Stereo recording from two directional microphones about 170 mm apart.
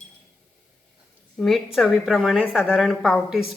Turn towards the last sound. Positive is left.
turn(degrees=0)  # may be behind; listen again after turning